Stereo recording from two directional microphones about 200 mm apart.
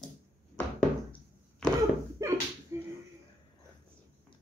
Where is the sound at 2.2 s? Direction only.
15° right (ahead or behind).